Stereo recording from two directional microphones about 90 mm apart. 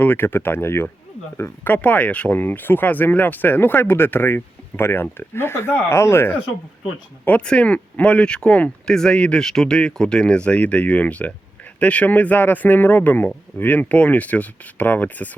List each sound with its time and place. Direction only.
0.0 s speech: 25° left (ahead or behind)
7.3 s speech: 15° left (ahead or behind)